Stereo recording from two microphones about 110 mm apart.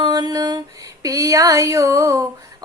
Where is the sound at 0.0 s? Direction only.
35° right (ahead or behind).